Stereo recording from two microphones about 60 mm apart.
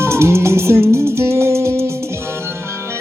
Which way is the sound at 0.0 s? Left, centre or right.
Right.